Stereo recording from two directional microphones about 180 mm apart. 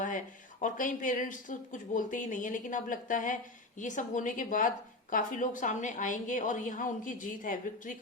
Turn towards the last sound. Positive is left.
turn(degrees=45)  # may be behind; listen again after turning